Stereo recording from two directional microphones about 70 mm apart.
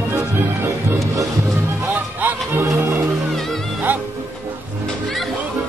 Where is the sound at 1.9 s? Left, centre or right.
Right.